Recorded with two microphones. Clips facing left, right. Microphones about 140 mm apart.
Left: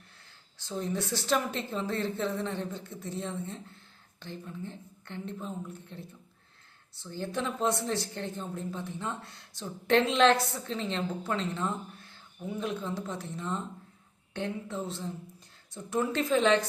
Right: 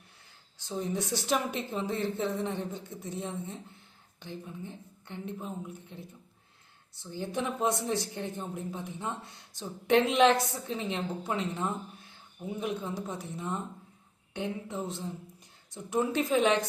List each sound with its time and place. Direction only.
0.6 s speech: 15° right (ahead or behind)
7.0 s speech: 15° right (ahead or behind)